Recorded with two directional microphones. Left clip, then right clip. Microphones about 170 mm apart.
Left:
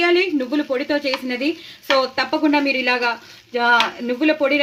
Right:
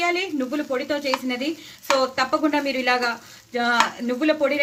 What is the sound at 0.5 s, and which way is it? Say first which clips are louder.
A woman's voice: left 4 dB; 45° left (ahead or behind).